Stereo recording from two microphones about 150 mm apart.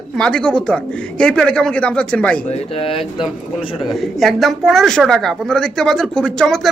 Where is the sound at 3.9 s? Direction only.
Centre (ahead or behind).